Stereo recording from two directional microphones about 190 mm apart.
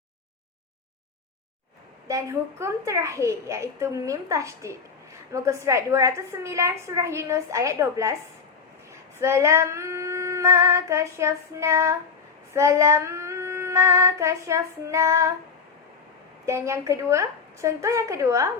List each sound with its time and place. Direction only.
2.0 s a woman's voice: 15° right (ahead or behind)
8.9 s female singing: 15° right (ahead or behind)
12.5 s child singing: 15° right (ahead or behind)
16.5 s a woman's voice: 15° right (ahead or behind)